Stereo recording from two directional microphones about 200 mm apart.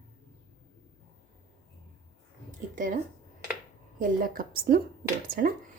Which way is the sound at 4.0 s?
45° right (ahead or behind).